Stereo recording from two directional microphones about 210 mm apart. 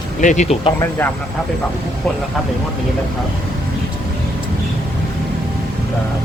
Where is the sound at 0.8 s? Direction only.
10° left (ahead or behind).